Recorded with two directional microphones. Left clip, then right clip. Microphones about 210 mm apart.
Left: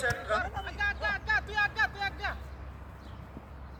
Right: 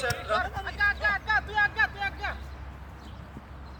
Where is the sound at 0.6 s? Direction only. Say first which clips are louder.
Right 6 dB; 15° left (ahead or behind).